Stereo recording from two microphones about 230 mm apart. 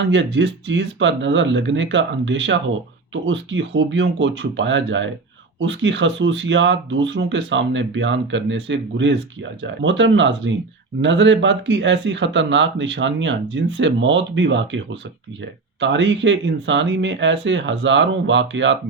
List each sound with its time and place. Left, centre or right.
0.0 s speech: right
15.8 s speech: right